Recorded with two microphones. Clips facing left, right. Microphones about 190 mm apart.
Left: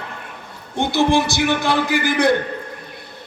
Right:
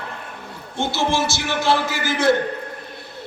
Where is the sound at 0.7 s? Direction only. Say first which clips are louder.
Left 5 dB; 15° left (ahead or behind).